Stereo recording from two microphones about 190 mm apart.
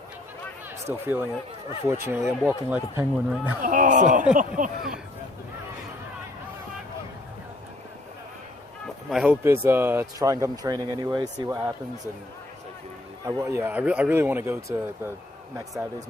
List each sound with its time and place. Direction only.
1.0 s speech: 10° right (ahead or behind)
3.6 s speech: 45° right (ahead or behind)
9.0 s speech: 5° right (ahead or behind)
13.2 s speech: 15° right (ahead or behind)